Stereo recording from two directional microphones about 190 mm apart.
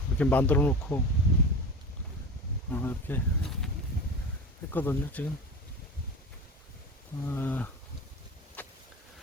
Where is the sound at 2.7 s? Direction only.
10° left (ahead or behind).